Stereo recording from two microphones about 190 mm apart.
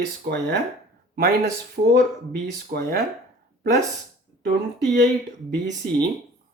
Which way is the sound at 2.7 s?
50° right (ahead or behind).